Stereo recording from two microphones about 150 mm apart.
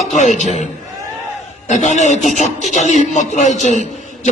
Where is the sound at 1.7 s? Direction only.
55° left (ahead or behind).